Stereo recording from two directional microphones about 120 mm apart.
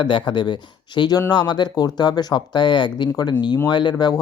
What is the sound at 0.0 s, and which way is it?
Speech, 45° left (ahead or behind).